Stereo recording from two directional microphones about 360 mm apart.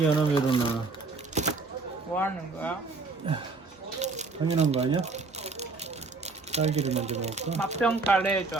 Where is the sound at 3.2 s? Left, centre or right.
Centre.